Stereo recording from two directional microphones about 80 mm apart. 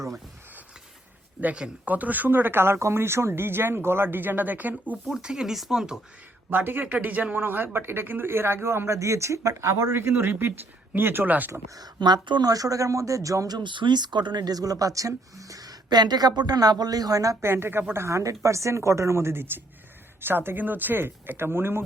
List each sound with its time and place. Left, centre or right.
1.4 s speech: centre
5.1 s speech: centre
6.5 s speech: right
11.9 s speech: right
12.5 s speech: right
13.6 s speech: right
17.4 s a woman's voice: right